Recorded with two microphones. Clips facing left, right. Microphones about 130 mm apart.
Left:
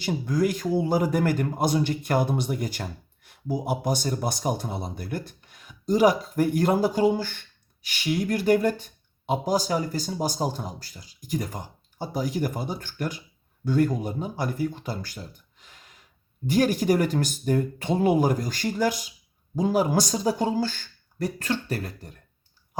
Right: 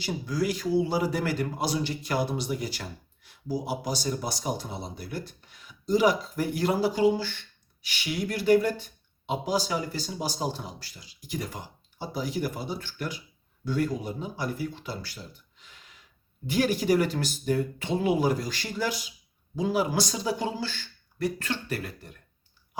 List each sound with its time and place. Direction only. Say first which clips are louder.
0.0 s speech: left 4 dB; 50° left (ahead or behind)